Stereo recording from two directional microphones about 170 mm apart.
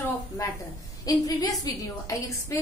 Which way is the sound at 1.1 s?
20° left (ahead or behind).